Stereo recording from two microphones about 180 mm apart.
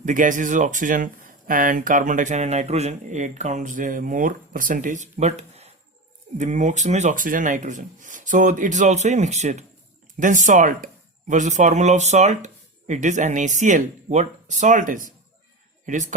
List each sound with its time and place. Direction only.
0.0 s speech: 45° right (ahead or behind)